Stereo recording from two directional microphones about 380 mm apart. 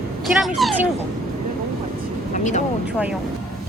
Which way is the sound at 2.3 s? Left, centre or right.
Centre.